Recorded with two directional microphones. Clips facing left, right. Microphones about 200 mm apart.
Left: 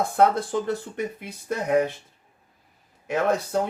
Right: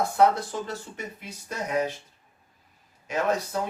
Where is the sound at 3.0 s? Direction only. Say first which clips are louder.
Left 3 dB; 55° left (ahead or behind).